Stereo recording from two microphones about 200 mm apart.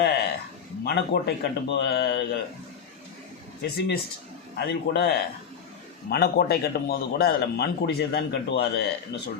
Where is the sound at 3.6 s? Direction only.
55° left (ahead or behind).